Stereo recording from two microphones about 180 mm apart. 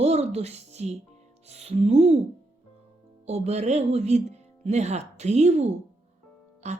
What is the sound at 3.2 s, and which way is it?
Speech, 35° right (ahead or behind).